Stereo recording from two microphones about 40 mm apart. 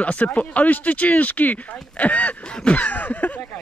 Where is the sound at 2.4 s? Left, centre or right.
Left.